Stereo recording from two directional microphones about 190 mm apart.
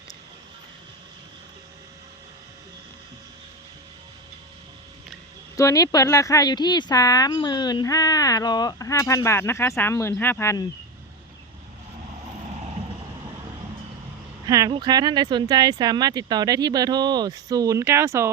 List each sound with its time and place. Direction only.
5.5 s speech: 15° left (ahead or behind)
14.4 s speech: 20° right (ahead or behind)